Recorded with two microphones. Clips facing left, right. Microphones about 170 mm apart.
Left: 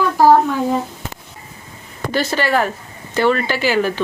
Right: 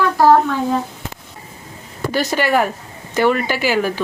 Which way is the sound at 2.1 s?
15° right (ahead or behind).